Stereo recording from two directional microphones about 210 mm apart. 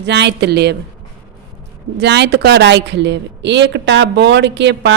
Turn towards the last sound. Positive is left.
turn(degrees=-55)  # may be behind; listen again after turning